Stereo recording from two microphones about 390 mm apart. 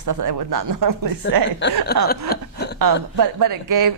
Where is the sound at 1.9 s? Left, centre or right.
Left.